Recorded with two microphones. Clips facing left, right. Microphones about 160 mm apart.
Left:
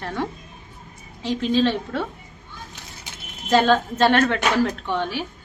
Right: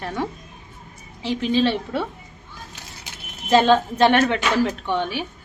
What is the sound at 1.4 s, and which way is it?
Speech, 10° right (ahead or behind).